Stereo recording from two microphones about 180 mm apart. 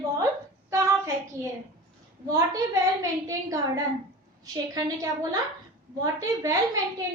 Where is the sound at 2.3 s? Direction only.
20° right (ahead or behind).